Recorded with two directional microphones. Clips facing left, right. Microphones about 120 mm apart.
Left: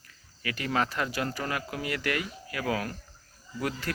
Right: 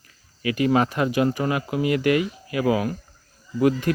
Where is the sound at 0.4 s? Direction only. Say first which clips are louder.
Right 9 dB; 20° right (ahead or behind).